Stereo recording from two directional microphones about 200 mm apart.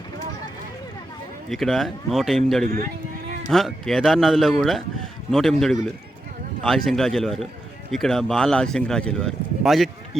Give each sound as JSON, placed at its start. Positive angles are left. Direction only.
{"t": 1.5, "sound": "speech", "side_deg": 0}
{"t": 2.6, "sound": "speech", "side_deg": -35}
{"t": 3.5, "sound": "speech", "side_deg": 0}